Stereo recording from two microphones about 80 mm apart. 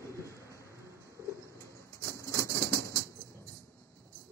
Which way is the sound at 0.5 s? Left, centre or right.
Right.